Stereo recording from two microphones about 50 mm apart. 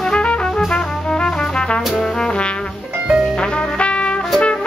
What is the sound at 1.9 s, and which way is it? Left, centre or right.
Trombone, centre.